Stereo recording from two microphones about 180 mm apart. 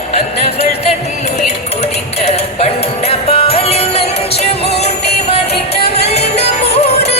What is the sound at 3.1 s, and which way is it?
Music, 30° left (ahead or behind).